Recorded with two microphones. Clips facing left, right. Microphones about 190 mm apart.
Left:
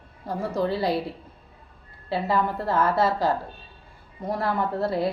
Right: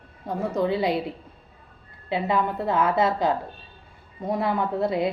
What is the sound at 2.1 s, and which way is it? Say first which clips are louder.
Speech: even; centre (ahead or behind).